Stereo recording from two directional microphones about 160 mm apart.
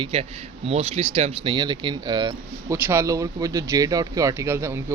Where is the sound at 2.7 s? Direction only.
15° right (ahead or behind).